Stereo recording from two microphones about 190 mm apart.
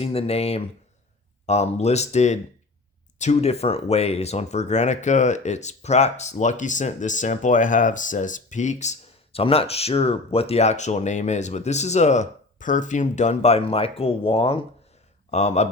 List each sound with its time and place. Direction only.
0.0 s speech: 30° left (ahead or behind)